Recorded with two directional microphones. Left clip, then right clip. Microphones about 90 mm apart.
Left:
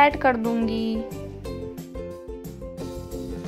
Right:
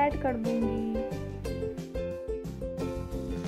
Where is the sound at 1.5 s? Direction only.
5° left (ahead or behind).